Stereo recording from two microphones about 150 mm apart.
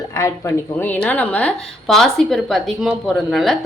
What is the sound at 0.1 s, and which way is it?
A woman's voice, 20° left (ahead or behind).